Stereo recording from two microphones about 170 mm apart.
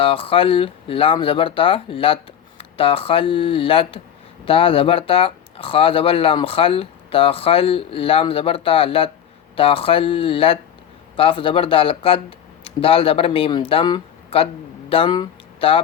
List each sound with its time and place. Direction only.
0.0 s speech: 30° left (ahead or behind)